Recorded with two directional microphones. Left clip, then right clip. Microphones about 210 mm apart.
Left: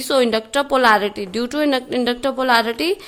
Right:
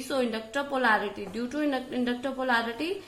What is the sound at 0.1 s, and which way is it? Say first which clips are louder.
A woman's voice: left 12 dB; 55° left (ahead or behind).